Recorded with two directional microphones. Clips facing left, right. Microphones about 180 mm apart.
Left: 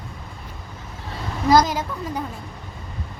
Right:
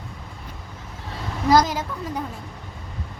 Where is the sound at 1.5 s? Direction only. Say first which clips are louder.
Left 1 dB; 15° left (ahead or behind).